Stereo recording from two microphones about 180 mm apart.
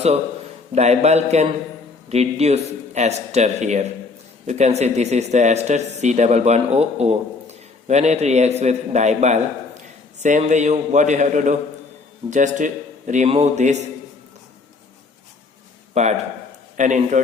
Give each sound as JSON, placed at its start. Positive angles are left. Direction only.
{"t": 0.8, "sound": "speech", "side_deg": -35}
{"t": 15.9, "sound": "a man's voice", "side_deg": -35}